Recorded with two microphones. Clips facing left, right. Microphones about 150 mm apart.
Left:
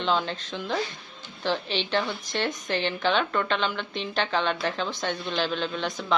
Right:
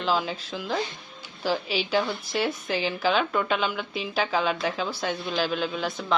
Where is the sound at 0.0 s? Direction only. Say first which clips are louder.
Even; 5° right (ahead or behind).